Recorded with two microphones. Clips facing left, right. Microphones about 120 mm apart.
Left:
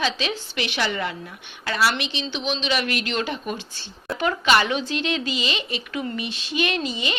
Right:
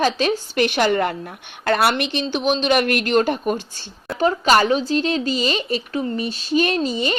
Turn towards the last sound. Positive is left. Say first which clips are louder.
# right 5 dB
turn(degrees=-40)  # may be behind; listen again after turning